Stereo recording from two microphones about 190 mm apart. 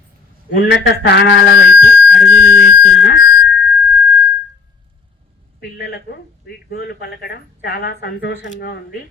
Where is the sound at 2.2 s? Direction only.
60° left (ahead or behind).